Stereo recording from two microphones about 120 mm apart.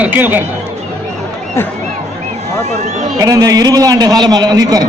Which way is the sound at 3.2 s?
30° right (ahead or behind).